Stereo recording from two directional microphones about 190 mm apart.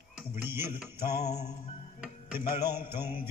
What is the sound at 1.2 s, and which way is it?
Music, 35° left (ahead or behind).